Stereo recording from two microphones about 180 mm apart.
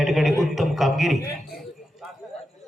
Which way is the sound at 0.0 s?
Centre (ahead or behind).